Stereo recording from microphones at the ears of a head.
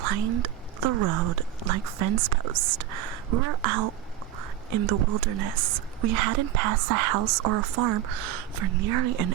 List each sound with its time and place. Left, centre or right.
0.0 s speech: right